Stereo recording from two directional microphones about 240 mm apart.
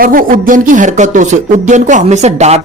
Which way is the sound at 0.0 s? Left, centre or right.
Right.